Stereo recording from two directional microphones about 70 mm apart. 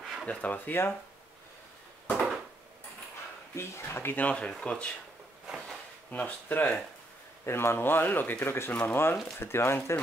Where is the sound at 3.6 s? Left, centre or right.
Left.